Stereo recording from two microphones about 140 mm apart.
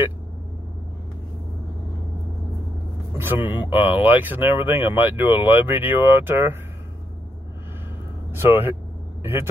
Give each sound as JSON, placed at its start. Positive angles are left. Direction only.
{"t": 3.2, "sound": "speech", "side_deg": -15}
{"t": 8.3, "sound": "speech", "side_deg": -15}